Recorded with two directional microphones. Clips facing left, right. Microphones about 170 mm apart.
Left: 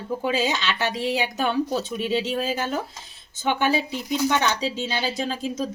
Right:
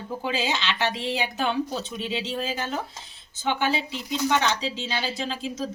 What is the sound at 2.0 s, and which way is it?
Speech, 45° left (ahead or behind).